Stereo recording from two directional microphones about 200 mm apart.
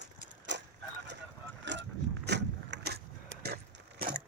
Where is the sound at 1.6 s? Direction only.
60° right (ahead or behind).